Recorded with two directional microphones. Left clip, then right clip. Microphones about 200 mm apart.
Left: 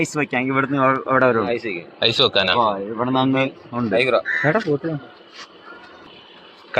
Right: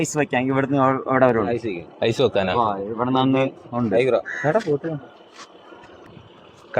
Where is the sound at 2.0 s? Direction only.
35° right (ahead or behind).